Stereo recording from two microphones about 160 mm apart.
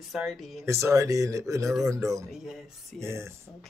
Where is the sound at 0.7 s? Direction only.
20° right (ahead or behind).